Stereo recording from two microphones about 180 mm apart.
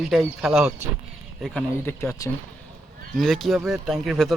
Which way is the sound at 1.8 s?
15° left (ahead or behind).